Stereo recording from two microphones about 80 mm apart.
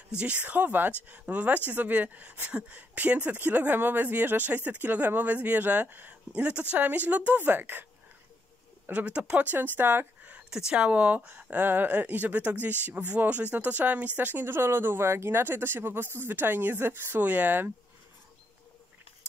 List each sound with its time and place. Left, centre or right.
0.2 s speech: centre
8.8 s speech: centre